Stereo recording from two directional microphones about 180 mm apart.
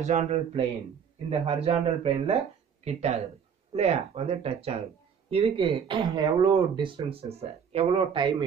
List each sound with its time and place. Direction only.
0.0 s speech: 40° right (ahead or behind)